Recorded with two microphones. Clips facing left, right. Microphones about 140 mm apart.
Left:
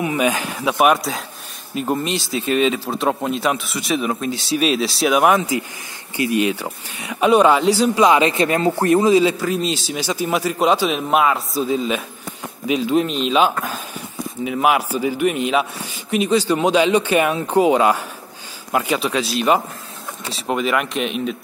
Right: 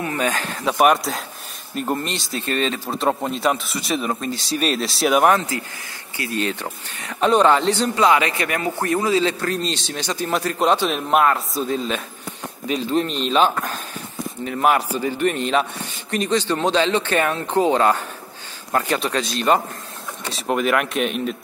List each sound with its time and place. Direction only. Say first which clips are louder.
0.0 s speech: left 4 dB; 10° left (ahead or behind)
5.3 s speech: left 2 dB; 10° left (ahead or behind)